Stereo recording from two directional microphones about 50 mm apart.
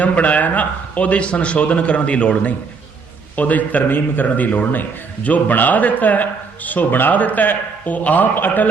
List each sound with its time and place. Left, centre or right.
0.0 s a man's voice: left